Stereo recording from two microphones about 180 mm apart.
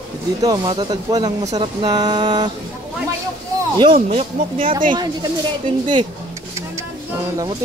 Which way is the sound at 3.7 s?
30° right (ahead or behind).